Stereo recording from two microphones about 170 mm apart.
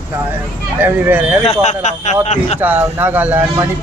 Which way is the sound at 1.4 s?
40° left (ahead or behind).